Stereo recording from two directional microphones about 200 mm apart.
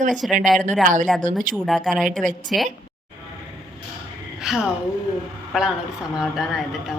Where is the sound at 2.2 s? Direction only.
40° right (ahead or behind).